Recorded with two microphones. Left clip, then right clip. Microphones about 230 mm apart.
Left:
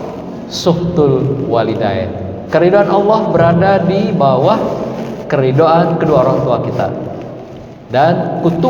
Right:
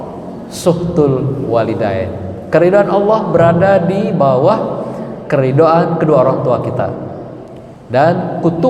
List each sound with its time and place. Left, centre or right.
0.6 s a man's voice: right
7.9 s a man's voice: right